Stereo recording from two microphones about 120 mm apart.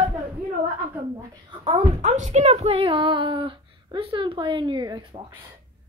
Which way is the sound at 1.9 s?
85° right.